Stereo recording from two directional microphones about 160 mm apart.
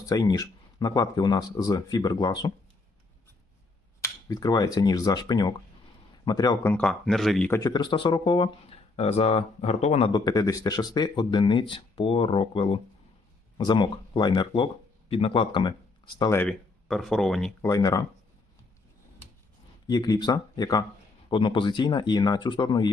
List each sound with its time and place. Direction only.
0.0 s speech: 20° left (ahead or behind)
4.0 s speech: 25° left (ahead or behind); by 7.6 s 5° left (ahead or behind)
7.6 s speech: 25° left (ahead or behind); by 10.1 s 40° left (ahead or behind)
10.1 s speech: 25° left (ahead or behind)
16.4 s speech: 5° left (ahead or behind)
17.6 s speech: 20° left (ahead or behind)
19.9 s speech: 25° left (ahead or behind)